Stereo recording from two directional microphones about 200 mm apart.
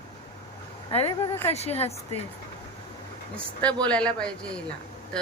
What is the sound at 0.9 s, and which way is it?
Speech, 25° left (ahead or behind).